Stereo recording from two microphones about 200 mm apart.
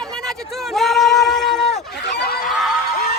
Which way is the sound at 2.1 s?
50° left (ahead or behind).